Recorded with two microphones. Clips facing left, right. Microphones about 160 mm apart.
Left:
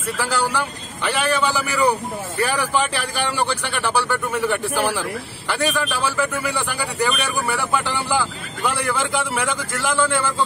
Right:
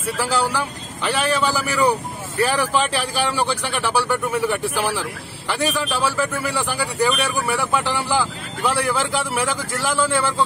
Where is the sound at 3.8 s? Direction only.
5° right (ahead or behind).